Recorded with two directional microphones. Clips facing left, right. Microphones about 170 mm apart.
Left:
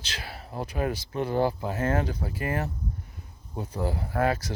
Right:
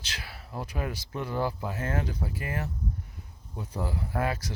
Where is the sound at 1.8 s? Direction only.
40° left (ahead or behind).